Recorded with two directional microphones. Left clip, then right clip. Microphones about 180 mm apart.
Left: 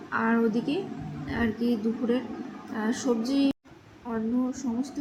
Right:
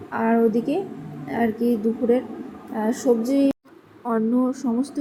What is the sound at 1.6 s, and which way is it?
Speech, 30° right (ahead or behind).